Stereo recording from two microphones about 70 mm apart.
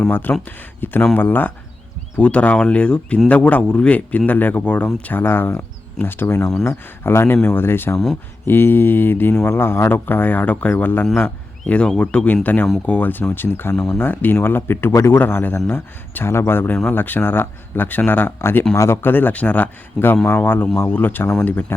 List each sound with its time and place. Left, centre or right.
0.1 s speech: left
5.2 s speech: left
6.4 s speech: centre
6.7 s speech: left
13.7 s speech: centre
14.0 s speech: left
15.7 s speech: left
18.7 s speech: left
19.0 s speech: left